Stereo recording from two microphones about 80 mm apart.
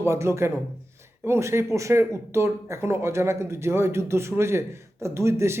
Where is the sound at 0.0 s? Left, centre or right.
Right.